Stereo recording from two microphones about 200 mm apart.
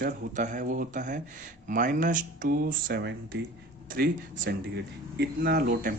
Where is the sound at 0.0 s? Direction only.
40° right (ahead or behind).